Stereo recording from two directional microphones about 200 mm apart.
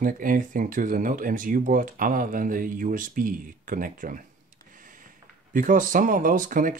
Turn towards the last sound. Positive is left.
turn(degrees=-40)  # may be behind; listen again after turning